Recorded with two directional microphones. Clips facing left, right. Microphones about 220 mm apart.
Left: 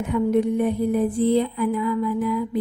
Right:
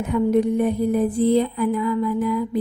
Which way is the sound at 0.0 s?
40° right (ahead or behind).